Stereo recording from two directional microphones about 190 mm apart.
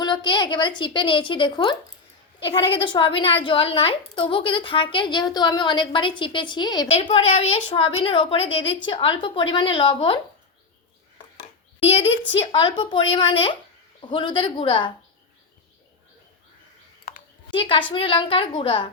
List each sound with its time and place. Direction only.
0.0 s a woman's voice: 20° left (ahead or behind)
11.8 s a child's voice: 30° left (ahead or behind)
17.5 s a woman's voice: 25° left (ahead or behind)